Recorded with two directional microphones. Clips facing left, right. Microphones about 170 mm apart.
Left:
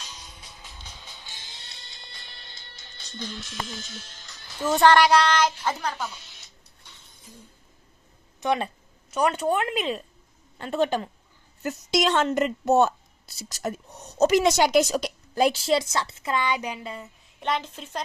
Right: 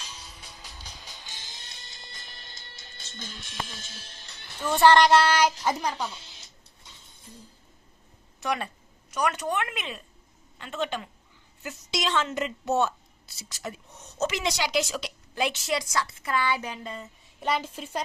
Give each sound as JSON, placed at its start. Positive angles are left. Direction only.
{"t": 0.1, "sound": "music", "side_deg": -5}
{"t": 1.5, "sound": "music", "side_deg": -45}
{"t": 3.5, "sound": "speech", "side_deg": -30}
{"t": 4.6, "sound": "speech", "side_deg": 10}
{"t": 8.4, "sound": "a woman's voice", "side_deg": 25}
{"t": 17.4, "sound": "speech", "side_deg": -5}